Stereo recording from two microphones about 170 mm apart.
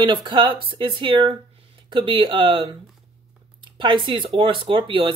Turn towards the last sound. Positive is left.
turn(degrees=-30)  # may be behind; listen again after turning